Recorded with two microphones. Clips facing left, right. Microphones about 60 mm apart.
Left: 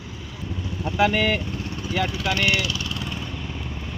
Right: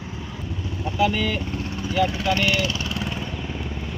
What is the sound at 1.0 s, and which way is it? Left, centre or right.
Speech, left.